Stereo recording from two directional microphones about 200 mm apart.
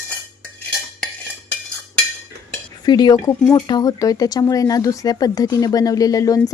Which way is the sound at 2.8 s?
20° left (ahead or behind).